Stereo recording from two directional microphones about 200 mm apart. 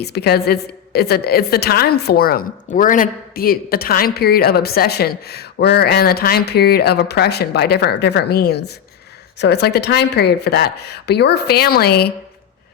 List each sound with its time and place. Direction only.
0.0 s a woman's voice: 55° left (ahead or behind)